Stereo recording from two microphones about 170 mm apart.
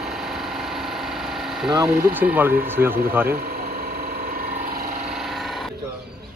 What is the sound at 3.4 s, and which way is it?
Sewing machine, 60° right (ahead or behind).